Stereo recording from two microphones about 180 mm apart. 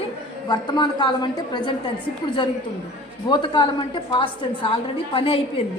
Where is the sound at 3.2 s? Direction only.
25° left (ahead or behind).